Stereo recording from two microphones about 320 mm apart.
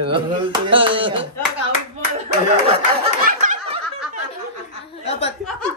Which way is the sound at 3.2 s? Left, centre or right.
Right.